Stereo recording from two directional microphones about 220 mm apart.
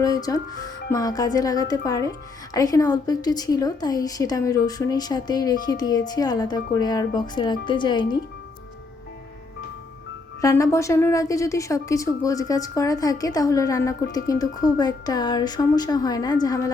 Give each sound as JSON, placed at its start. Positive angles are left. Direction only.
{"t": 0.0, "sound": "a woman's voice", "side_deg": 15}
{"t": 10.4, "sound": "a woman's voice", "side_deg": 15}